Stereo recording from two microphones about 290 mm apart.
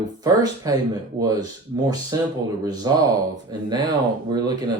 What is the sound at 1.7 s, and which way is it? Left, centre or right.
Speech, centre.